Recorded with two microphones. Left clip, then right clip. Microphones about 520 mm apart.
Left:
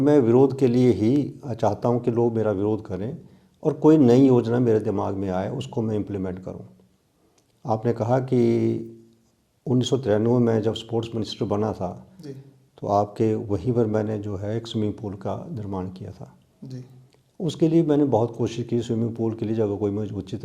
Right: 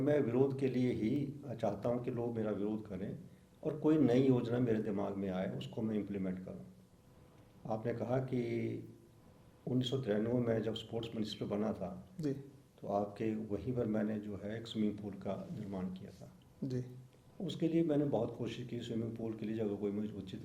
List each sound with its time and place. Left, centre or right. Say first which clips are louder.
0.0 s speech: left 15 dB; left
7.7 s speech: left 15 dB; left
16.6 s speech: even; right
17.4 s speech: left 14 dB; left